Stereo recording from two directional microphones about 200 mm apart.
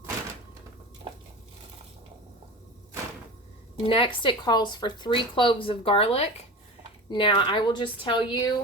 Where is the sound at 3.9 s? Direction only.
25° left (ahead or behind).